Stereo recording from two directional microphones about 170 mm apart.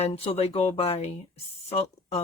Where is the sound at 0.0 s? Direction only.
35° left (ahead or behind).